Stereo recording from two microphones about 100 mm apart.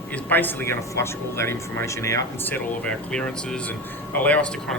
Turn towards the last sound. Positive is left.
turn(degrees=10)  # may be behind; listen again after turning